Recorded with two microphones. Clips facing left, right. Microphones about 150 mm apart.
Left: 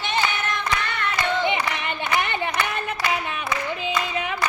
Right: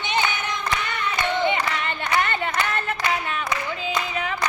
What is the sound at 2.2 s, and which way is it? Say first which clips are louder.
Clapping: right 1 dB; 15° left (ahead or behind).